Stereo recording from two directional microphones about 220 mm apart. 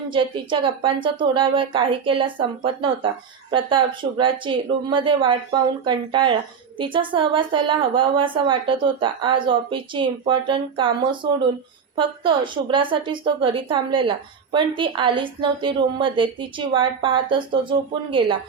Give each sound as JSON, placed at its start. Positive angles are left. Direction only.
{"t": 0.1, "sound": "a woman's voice", "side_deg": -20}